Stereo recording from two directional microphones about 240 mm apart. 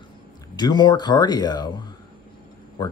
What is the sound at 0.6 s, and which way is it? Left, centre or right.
Speech, centre.